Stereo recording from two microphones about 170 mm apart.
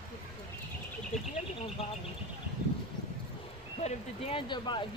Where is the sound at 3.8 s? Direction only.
35° left (ahead or behind).